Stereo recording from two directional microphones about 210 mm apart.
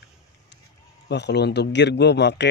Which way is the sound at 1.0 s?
55° left (ahead or behind).